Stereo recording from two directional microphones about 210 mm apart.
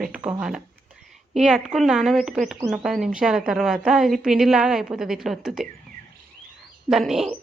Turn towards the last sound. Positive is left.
turn(degrees=0)  # may be behind; listen again after turning